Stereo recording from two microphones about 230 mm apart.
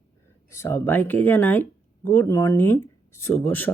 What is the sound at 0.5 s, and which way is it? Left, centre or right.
Speech, centre.